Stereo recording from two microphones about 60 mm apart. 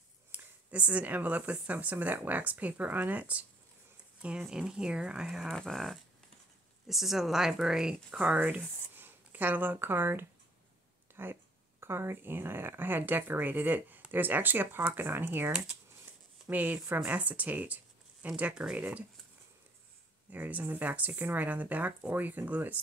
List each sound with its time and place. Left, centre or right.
0.3 s speech: right; by 5.5 s centre
5.5 s speech: centre
8.4 s speech: right
16.1 s a sound: right
16.4 s speech: right
20.2 s speech: right